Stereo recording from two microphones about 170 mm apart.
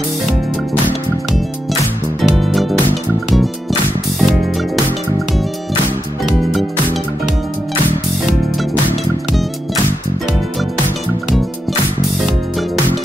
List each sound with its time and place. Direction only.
2.2 s music: centre (ahead or behind)